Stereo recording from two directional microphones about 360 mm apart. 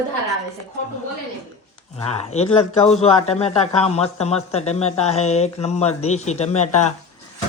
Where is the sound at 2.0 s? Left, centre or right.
Centre.